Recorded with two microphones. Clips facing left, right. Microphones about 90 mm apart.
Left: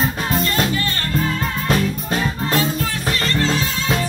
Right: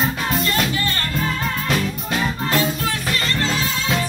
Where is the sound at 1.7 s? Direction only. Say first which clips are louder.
Left 5 dB; 35° left (ahead or behind).